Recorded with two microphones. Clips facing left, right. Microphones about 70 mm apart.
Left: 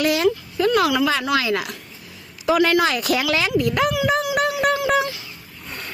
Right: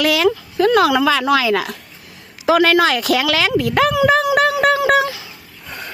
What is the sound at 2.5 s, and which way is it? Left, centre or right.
Speech, right.